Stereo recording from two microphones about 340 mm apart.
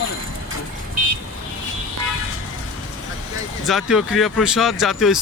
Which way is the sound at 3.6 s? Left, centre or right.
Centre.